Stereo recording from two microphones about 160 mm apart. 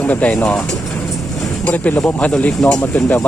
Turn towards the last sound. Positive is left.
turn(degrees=10)  # may be behind; listen again after turning